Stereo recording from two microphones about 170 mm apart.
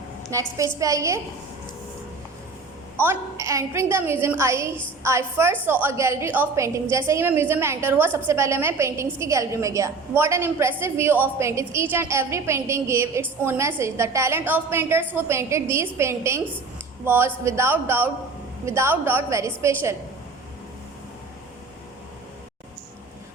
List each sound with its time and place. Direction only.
0.3 s a woman's voice: 20° right (ahead or behind)
3.0 s a woman's voice: 15° right (ahead or behind)